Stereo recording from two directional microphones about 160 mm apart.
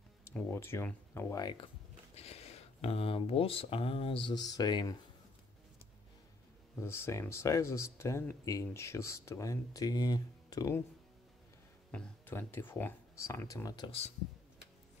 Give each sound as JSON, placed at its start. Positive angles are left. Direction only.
{"t": 0.2, "sound": "speech", "side_deg": 15}
{"t": 2.1, "sound": "speech", "side_deg": 40}
{"t": 6.8, "sound": "speech", "side_deg": 15}
{"t": 11.9, "sound": "speech", "side_deg": 10}